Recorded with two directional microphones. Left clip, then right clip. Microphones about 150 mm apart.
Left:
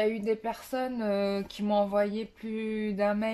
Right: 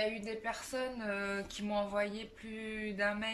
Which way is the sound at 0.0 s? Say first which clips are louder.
Left 8 dB; 35° left (ahead or behind).